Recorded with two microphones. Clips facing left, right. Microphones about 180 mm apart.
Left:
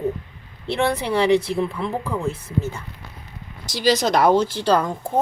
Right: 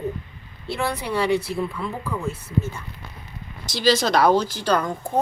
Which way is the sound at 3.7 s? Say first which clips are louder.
Left 1 dB; 15° left (ahead or behind).